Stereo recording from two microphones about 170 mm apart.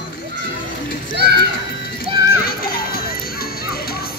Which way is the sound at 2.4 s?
60° left (ahead or behind).